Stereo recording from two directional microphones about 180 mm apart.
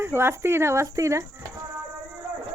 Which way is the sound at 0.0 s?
15° right (ahead or behind).